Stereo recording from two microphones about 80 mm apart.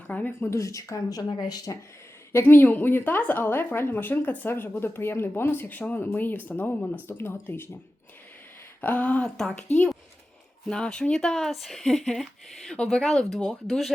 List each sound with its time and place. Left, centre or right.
0.1 s a woman's voice: left
0.3 s speech: left
2.3 s a woman's voice: left
8.8 s speech: left; by 13.9 s centre